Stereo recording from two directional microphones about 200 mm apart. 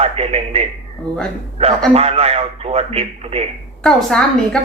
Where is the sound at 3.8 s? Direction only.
5° left (ahead or behind).